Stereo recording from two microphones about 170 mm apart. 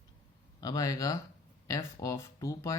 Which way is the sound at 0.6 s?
20° left (ahead or behind).